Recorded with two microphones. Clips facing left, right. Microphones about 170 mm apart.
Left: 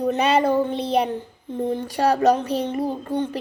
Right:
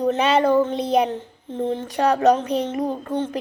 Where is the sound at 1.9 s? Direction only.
35° left (ahead or behind).